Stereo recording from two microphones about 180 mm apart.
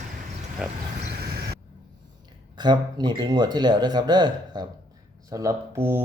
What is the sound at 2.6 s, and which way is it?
Speech, 25° right (ahead or behind).